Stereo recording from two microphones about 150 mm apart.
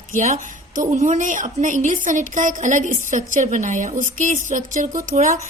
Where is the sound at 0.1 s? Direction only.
55° right (ahead or behind).